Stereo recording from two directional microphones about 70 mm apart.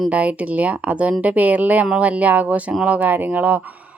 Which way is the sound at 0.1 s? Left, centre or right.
Centre.